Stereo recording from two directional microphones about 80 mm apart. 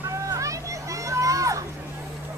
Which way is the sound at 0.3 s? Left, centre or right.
Right.